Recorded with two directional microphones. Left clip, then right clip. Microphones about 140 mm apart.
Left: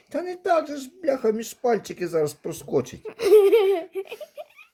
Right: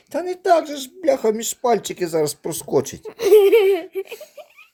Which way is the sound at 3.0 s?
Centre (ahead or behind).